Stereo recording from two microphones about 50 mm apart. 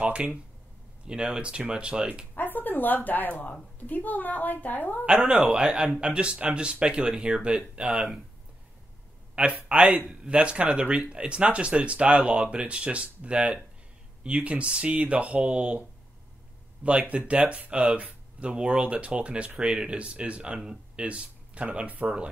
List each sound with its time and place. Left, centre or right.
0.0 s speech: right
2.3 s a woman's voice: left
5.0 s a man's voice: centre
9.3 s speech: right
16.8 s speech: right